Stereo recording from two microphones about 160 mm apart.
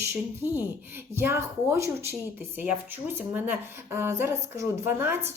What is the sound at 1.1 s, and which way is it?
Speech, 15° right (ahead or behind).